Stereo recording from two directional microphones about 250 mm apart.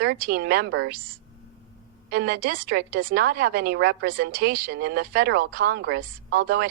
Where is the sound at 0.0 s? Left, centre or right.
Right.